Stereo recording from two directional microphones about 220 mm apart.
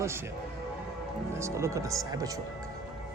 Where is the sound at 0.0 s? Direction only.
10° right (ahead or behind).